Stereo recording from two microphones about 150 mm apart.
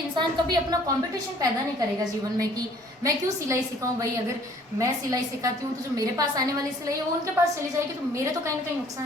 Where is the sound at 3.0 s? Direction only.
20° right (ahead or behind).